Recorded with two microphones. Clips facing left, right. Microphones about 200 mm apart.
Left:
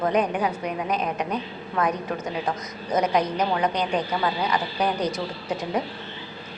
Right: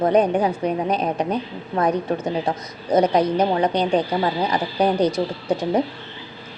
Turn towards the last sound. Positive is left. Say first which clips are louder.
# right 6 dB
turn(degrees=-30)  # may be behind; listen again after turning